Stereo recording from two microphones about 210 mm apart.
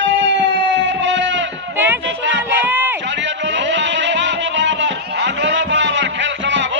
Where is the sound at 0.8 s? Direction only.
60° right (ahead or behind).